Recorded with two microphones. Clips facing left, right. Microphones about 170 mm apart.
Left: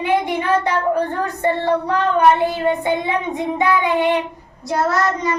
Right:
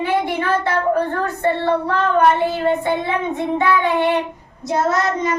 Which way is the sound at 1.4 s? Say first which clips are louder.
Even; 15° left (ahead or behind).